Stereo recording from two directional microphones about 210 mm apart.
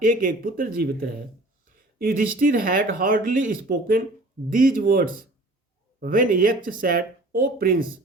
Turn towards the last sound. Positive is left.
turn(degrees=-45)  # may be behind; listen again after turning